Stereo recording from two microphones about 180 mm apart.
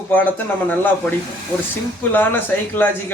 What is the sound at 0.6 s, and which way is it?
Speech, 10° left (ahead or behind).